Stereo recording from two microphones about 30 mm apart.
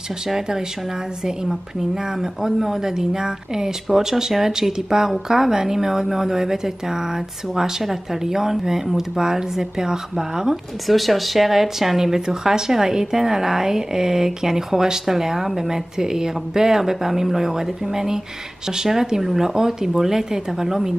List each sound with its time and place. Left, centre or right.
2.1 s speech: centre
10.9 s speech: centre